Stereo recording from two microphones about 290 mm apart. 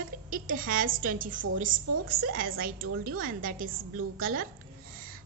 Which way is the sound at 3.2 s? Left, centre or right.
Right.